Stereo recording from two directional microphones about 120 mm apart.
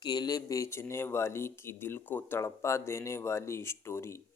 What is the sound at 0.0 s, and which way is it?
Speech, 35° left (ahead or behind).